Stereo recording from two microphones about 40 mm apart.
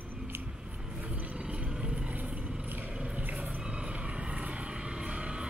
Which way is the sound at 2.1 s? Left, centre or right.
Right.